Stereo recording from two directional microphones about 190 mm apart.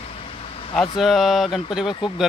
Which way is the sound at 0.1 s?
30° left (ahead or behind).